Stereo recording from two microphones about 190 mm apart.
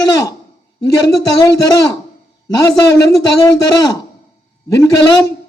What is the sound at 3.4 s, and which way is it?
A man's voice, 20° left (ahead or behind).